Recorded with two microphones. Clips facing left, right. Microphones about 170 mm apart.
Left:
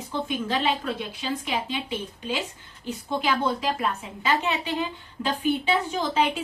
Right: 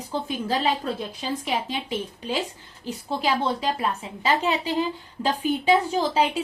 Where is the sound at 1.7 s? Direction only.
40° right (ahead or behind).